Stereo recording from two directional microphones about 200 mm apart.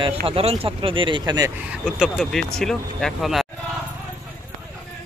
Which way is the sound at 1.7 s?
Centre (ahead or behind).